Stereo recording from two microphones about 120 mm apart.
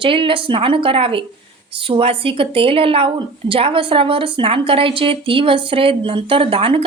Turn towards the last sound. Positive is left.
turn(degrees=-50)  # may be behind; listen again after turning